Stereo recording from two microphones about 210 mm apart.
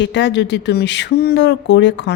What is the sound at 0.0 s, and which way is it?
Speech, 55° left (ahead or behind).